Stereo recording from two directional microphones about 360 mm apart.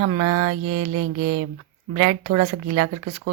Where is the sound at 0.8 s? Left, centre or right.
Right.